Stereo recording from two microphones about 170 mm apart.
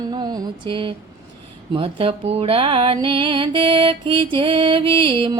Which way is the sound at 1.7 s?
30° right (ahead or behind).